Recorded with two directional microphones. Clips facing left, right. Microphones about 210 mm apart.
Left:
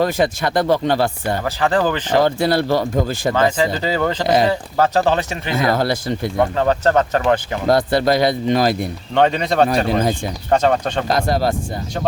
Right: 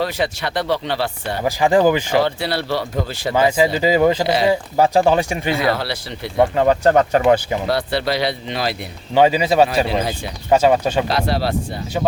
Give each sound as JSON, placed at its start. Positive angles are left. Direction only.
{"t": 0.0, "sound": "speech", "side_deg": 45}
{"t": 1.5, "sound": "speech", "side_deg": -10}
{"t": 2.2, "sound": "speech", "side_deg": 45}
{"t": 3.3, "sound": "speech", "side_deg": -10}
{"t": 5.5, "sound": "speech", "side_deg": 45}
{"t": 6.6, "sound": "speech", "side_deg": -10}
{"t": 7.7, "sound": "speech", "side_deg": 45}
{"t": 9.1, "sound": "speech", "side_deg": -5}
{"t": 9.8, "sound": "speech", "side_deg": 45}
{"t": 10.5, "sound": "speech", "side_deg": -10}
{"t": 11.1, "sound": "speech", "side_deg": 45}